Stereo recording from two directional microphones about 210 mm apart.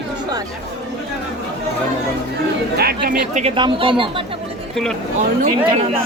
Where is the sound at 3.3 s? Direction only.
25° right (ahead or behind).